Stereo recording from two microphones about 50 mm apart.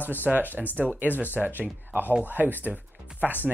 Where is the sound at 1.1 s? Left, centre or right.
Left.